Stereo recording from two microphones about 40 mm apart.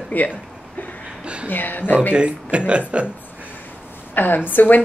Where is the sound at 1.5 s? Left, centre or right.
Left.